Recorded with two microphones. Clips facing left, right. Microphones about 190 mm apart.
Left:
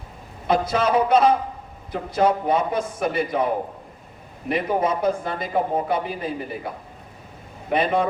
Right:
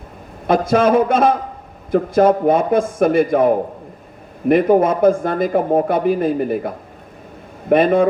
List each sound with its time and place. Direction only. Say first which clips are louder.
0.4 s speech: right 7 dB; 50° right (ahead or behind)